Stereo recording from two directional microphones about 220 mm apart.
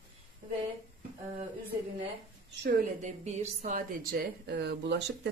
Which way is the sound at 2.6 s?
35° right (ahead or behind).